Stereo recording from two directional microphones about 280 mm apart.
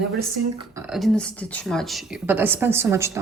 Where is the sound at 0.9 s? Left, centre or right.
Centre.